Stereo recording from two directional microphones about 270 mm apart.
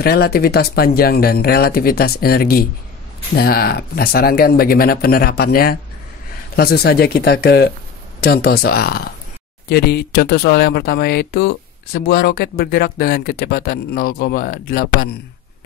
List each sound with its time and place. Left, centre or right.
0.0 s speech: left